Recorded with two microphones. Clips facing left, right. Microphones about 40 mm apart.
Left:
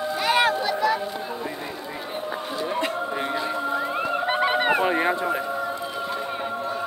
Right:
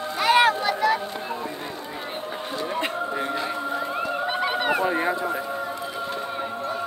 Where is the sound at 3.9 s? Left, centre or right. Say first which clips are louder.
Left 2 dB; centre.